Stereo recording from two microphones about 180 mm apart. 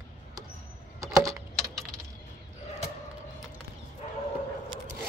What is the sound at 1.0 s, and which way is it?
Typing, 15° right (ahead or behind).